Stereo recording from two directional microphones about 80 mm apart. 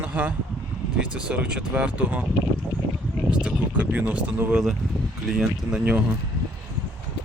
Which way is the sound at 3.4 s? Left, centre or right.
Centre.